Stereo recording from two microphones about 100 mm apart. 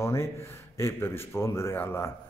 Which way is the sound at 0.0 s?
30° left (ahead or behind).